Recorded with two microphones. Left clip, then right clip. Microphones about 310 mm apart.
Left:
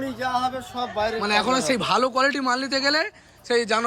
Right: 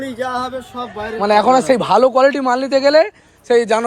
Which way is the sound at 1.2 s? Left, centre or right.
Centre.